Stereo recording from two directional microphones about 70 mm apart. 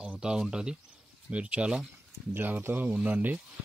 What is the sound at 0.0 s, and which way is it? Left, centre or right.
Speech, centre.